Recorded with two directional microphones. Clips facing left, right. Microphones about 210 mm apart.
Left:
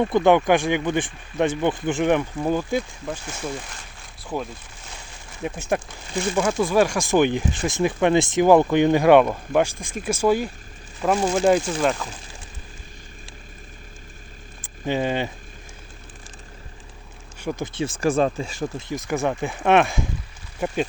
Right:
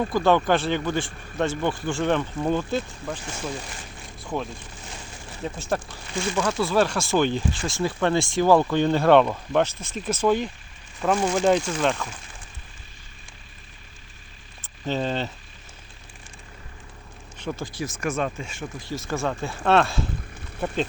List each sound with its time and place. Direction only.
0.0 s speech: 20° left (ahead or behind)
5.4 s speech: 15° left (ahead or behind)
14.6 s speech: 10° left (ahead or behind)
17.4 s speech: 20° left (ahead or behind)
18.8 s speech: 20° left (ahead or behind)